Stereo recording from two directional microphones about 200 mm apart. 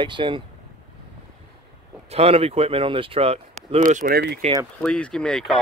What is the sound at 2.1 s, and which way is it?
Speech, 30° right (ahead or behind).